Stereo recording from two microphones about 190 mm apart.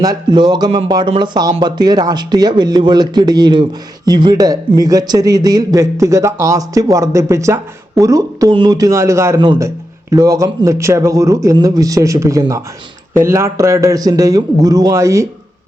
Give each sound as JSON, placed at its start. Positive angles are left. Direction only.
{"t": 0.0, "sound": "a man's voice", "side_deg": -20}